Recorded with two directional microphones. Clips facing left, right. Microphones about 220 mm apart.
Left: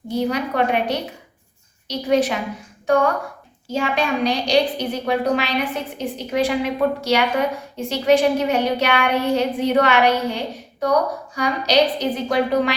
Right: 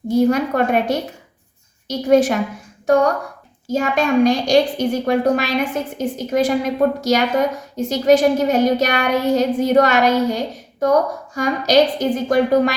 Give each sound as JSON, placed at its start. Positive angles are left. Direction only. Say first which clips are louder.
{"t": 0.2, "sound": "a woman's voice", "louder": "right 5 dB", "side_deg": -45}